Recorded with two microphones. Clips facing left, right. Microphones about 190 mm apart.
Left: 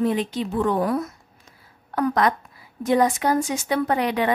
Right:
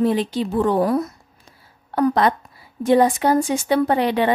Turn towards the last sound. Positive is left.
turn(degrees=-30)  # may be behind; listen again after turning